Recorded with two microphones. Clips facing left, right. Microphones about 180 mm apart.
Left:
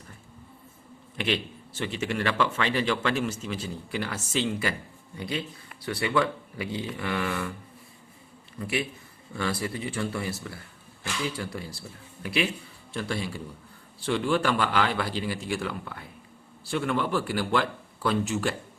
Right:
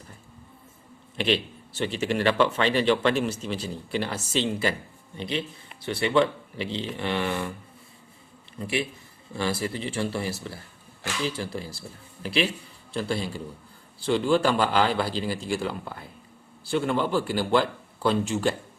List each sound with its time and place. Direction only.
1.1 s a man's voice: 30° right (ahead or behind)
8.5 s speech: 25° right (ahead or behind)
12.2 s a man's voice: 30° right (ahead or behind)